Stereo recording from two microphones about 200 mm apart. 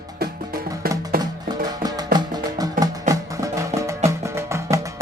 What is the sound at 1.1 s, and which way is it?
Music, 50° right (ahead or behind).